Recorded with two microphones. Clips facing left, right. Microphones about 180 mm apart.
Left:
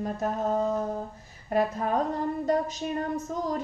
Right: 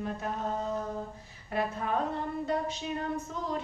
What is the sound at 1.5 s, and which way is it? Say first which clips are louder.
Female singing: left 6 dB; 40° left (ahead or behind).